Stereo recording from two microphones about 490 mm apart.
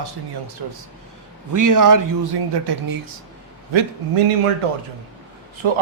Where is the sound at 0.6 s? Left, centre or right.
Right.